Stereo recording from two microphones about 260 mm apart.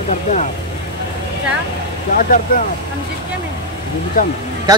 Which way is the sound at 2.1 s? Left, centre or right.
Left.